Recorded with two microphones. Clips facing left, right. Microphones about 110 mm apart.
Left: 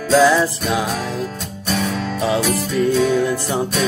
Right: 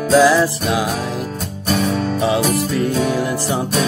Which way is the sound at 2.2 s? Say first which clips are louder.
Even; 30° right (ahead or behind).